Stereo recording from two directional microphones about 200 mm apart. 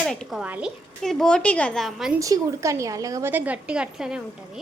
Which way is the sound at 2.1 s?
15° right (ahead or behind).